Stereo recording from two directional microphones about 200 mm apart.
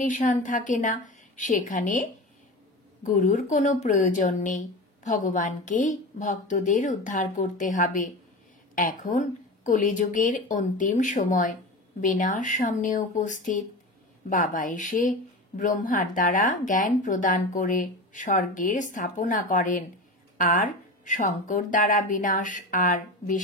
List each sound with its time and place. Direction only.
0.1 s a woman's voice: 40° left (ahead or behind)